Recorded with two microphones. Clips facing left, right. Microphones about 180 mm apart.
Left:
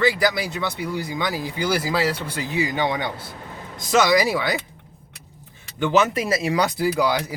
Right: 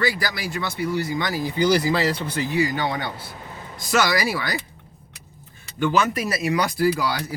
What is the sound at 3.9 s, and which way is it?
Speech, 20° left (ahead or behind).